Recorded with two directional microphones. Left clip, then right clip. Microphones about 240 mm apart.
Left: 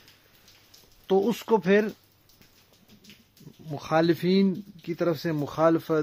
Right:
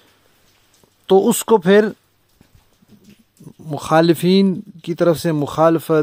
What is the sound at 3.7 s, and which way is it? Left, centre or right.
Speech, right.